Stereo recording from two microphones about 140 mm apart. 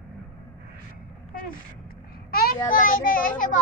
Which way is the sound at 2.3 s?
90° left.